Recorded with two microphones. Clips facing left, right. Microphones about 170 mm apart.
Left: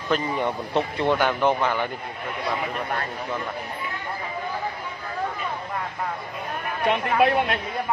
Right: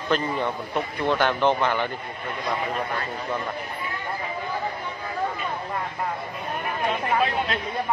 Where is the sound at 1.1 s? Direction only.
5° left (ahead or behind).